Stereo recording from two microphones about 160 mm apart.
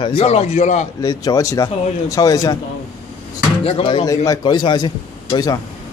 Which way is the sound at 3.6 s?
35° left (ahead or behind).